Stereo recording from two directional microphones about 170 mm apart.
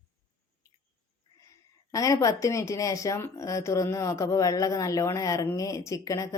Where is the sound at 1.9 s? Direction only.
20° left (ahead or behind).